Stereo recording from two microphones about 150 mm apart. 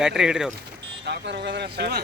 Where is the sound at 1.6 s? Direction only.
90° right.